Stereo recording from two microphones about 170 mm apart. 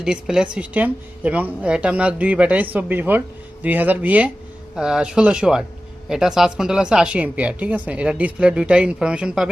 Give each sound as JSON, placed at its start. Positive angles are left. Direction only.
{"t": 0.0, "sound": "a woman's voice", "side_deg": -5}